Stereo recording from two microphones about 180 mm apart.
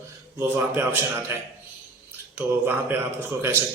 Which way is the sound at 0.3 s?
15° right (ahead or behind).